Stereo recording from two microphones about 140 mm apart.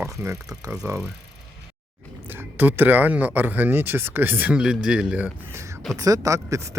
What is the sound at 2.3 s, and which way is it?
Speech, 15° right (ahead or behind).